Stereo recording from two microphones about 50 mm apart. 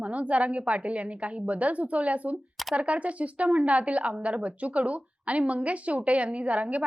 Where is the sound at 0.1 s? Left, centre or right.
Right.